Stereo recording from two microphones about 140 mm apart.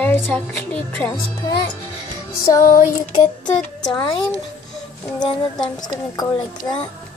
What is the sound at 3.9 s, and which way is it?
Speech, 35° left (ahead or behind).